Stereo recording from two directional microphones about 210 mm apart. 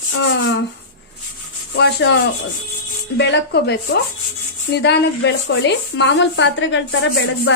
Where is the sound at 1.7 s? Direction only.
55° left (ahead or behind).